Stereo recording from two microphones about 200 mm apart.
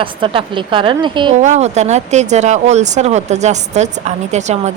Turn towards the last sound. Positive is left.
turn(degrees=-35)  # may be behind; listen again after turning